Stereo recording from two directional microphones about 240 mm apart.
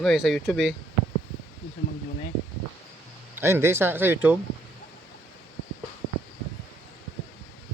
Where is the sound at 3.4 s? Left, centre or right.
Centre.